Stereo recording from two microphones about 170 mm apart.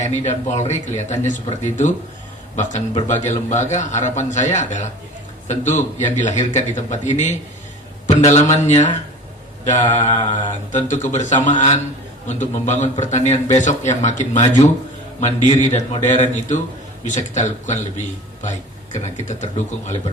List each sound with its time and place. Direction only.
0.0 s a man's voice: 40° left (ahead or behind)